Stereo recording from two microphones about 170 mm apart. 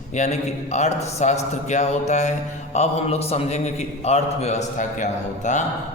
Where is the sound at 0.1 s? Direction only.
40° left (ahead or behind).